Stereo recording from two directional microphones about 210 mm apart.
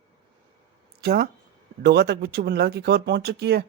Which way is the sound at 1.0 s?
50° right (ahead or behind).